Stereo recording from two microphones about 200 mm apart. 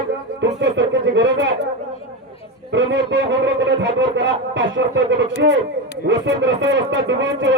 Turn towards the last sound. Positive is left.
turn(degrees=-65)  # may be behind; listen again after turning